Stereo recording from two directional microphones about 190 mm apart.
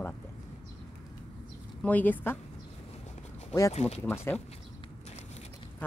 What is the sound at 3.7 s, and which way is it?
Speech, 35° left (ahead or behind).